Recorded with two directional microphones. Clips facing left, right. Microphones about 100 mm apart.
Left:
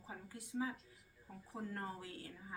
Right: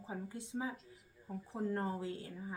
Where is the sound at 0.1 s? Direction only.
25° right (ahead or behind).